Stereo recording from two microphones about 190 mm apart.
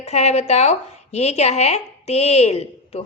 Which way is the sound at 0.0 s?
35° left (ahead or behind).